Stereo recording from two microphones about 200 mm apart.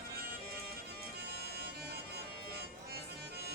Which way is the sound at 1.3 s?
50° right (ahead or behind).